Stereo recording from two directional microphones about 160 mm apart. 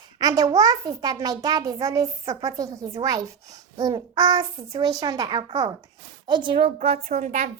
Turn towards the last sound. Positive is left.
turn(degrees=-45)  # may be behind; listen again after turning